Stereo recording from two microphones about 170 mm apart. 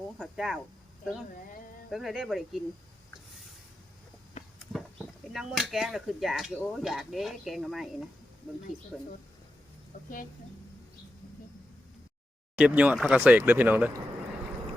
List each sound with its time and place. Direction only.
0.2 s speech: centre (ahead or behind)
1.9 s speech: centre (ahead or behind)
4.6 s speech: centre (ahead or behind)
9.9 s a sound: 50° left (ahead or behind)
12.5 s speech: 5° right (ahead or behind)